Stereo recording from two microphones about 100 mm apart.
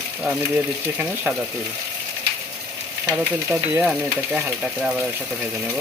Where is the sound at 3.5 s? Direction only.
15° right (ahead or behind).